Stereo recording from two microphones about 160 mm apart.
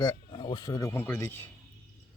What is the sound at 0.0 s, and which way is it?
Speech, 25° left (ahead or behind).